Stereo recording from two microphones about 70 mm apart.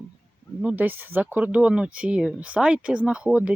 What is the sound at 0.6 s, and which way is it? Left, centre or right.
Speech, right.